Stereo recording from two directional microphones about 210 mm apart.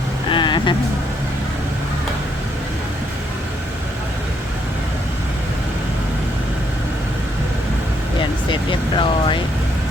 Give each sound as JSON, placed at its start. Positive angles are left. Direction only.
{"t": 0.3, "sound": "vehicle", "side_deg": 20}
{"t": 8.4, "sound": "vehicle", "side_deg": 25}